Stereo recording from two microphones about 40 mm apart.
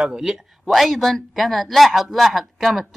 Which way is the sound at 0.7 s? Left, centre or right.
Centre.